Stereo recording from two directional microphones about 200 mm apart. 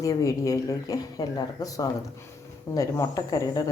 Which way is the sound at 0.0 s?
15° left (ahead or behind).